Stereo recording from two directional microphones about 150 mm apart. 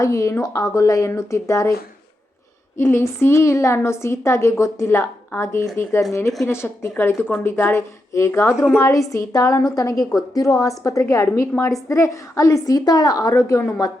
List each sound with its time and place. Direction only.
0.0 s a woman's voice: 20° left (ahead or behind)
2.7 s a woman's voice: 15° left (ahead or behind)